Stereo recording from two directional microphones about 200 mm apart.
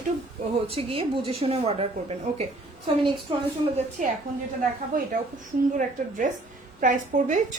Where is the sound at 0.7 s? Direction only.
30° right (ahead or behind).